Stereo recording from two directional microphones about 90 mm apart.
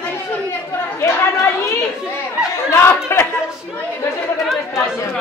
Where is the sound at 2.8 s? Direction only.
25° left (ahead or behind).